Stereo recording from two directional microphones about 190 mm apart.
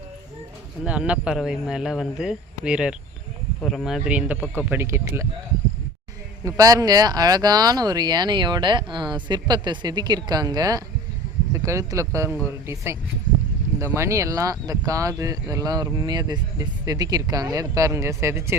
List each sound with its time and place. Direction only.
0.9 s speech: 5° right (ahead or behind)
6.4 s speech: 20° right (ahead or behind)